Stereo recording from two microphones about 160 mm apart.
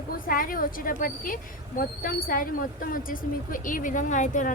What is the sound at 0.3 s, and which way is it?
A woman's voice, 60° left (ahead or behind).